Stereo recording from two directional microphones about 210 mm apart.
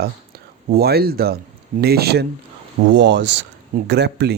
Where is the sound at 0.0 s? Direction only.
45° right (ahead or behind).